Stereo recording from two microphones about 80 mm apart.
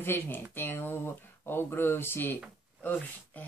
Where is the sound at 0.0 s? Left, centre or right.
Left.